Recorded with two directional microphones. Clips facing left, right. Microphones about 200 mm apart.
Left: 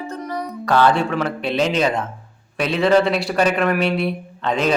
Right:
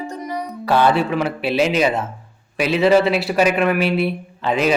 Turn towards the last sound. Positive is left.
turn(degrees=-5)  # may be behind; listen again after turning